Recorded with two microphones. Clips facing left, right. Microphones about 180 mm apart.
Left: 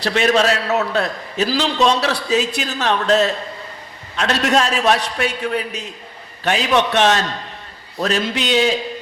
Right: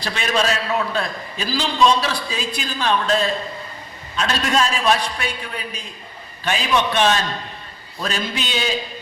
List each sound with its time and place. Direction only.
0.0 s a man's voice: 70° left (ahead or behind)